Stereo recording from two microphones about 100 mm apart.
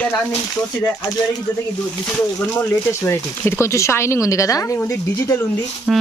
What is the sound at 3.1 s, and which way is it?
Speech, 25° left (ahead or behind).